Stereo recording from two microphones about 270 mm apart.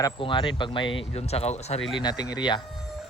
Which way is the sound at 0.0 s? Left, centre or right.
Centre.